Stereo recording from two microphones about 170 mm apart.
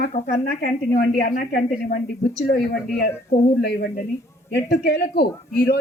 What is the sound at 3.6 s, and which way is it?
A woman's voice, 70° left (ahead or behind).